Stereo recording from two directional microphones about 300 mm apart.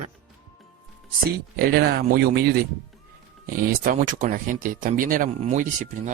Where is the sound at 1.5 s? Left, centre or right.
Right.